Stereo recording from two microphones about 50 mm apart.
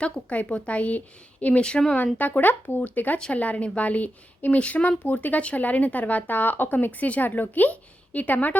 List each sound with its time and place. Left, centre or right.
0.0 s a woman's voice: left